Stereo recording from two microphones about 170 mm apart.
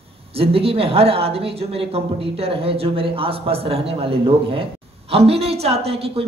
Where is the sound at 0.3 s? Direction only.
35° right (ahead or behind).